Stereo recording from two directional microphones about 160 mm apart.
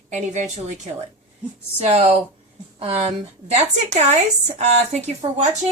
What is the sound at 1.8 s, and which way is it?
A woman's voice, 40° right (ahead or behind).